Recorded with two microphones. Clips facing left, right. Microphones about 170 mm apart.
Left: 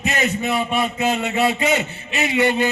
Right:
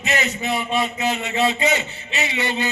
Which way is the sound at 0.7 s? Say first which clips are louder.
Left 2 dB; 55° left (ahead or behind).